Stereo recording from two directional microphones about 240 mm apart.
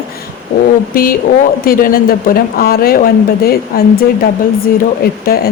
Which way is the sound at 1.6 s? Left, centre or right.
Left.